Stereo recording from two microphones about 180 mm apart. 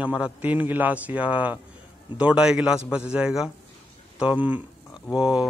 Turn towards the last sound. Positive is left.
turn(degrees=-5)  # may be behind; listen again after turning